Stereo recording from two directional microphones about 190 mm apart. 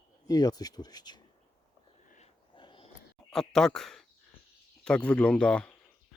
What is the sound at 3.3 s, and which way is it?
Speech, 5° left (ahead or behind).